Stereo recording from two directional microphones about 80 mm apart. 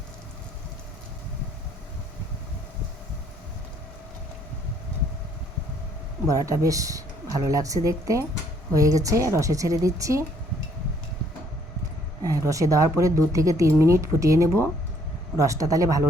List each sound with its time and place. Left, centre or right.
6.2 s a woman's voice: right
12.2 s a woman's voice: right